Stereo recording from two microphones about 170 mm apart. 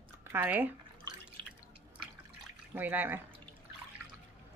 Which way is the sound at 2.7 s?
10° right (ahead or behind).